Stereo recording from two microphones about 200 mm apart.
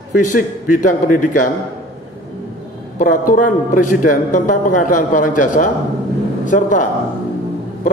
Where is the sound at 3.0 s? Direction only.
40° left (ahead or behind).